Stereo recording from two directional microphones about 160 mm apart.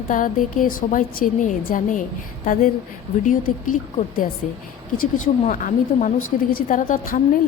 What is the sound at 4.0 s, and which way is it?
A woman's voice, 55° left (ahead or behind).